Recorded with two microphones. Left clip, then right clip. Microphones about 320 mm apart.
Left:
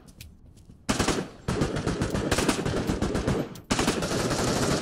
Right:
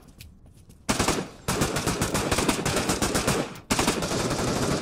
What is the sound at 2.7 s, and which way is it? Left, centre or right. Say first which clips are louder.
Machine gun: right 3 dB; centre.